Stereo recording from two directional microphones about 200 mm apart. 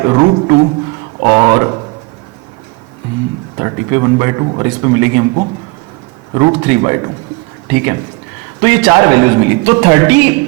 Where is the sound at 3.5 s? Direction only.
25° right (ahead or behind).